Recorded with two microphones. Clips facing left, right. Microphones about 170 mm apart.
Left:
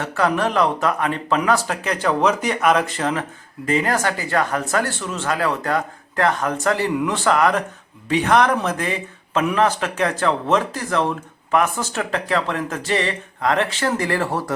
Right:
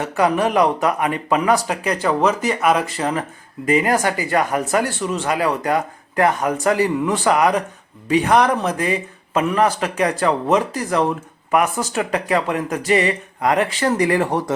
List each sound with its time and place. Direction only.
0.0 s speech: 15° right (ahead or behind)